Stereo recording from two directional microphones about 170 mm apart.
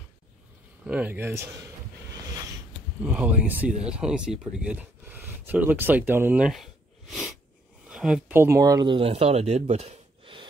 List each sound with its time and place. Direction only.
0.8 s speech: 10° right (ahead or behind)
3.0 s speech: 10° right (ahead or behind); by 10.4 s 35° right (ahead or behind)